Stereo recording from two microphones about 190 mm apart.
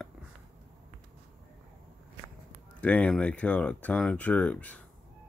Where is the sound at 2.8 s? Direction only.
5° left (ahead or behind).